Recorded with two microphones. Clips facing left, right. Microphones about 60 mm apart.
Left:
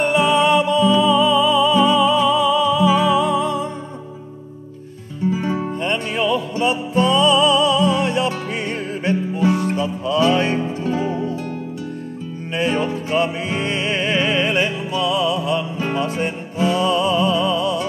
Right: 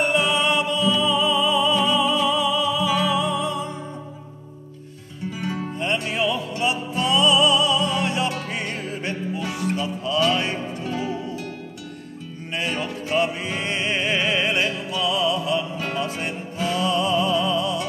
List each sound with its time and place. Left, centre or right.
0.0 s music: centre
5.3 s music: centre
6.1 s music: centre
10.3 s music: left
13.1 s music: centre
16.3 s music: centre
16.8 s music: centre